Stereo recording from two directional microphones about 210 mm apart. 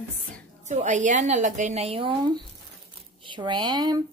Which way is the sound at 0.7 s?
35° right (ahead or behind).